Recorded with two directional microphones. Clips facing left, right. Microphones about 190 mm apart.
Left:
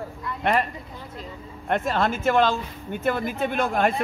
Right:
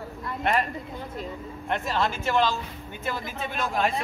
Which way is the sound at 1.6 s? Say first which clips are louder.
Left 4 dB; 50° left (ahead or behind).